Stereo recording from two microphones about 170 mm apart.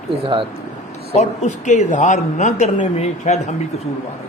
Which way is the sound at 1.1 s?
45° left (ahead or behind).